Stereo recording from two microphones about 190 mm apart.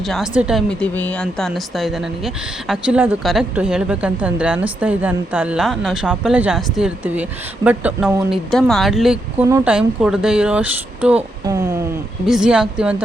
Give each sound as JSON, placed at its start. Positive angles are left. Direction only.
{"t": 0.0, "sound": "speech", "side_deg": 0}
{"t": 11.4, "sound": "a sound", "side_deg": -15}
{"t": 12.2, "sound": "speech", "side_deg": -5}